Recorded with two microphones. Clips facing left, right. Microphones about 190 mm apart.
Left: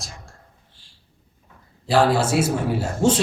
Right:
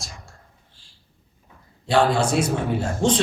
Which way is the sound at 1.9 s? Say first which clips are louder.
Left 1 dB; centre (ahead or behind).